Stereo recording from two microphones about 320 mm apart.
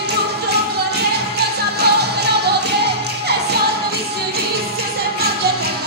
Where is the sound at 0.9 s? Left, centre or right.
Right.